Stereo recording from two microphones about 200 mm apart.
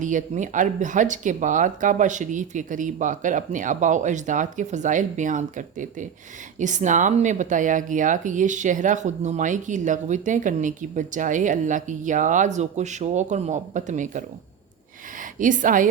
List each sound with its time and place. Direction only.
0.0 s speech: 40° right (ahead or behind)